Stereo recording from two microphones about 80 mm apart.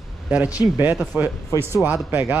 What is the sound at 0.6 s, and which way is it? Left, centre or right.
Speech, right.